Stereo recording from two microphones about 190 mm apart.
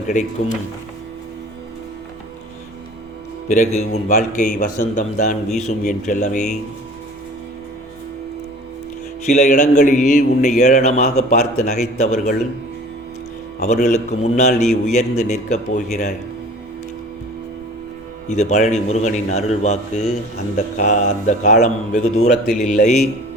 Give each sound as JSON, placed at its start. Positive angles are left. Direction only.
{"t": 0.1, "sound": "speech", "side_deg": 40}
{"t": 3.5, "sound": "speech", "side_deg": 40}
{"t": 9.2, "sound": "speech", "side_deg": 40}
{"t": 13.8, "sound": "speech", "side_deg": 40}
{"t": 18.3, "sound": "speech", "side_deg": 40}